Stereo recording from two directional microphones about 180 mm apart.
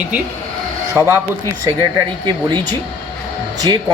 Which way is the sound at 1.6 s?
20° right (ahead or behind).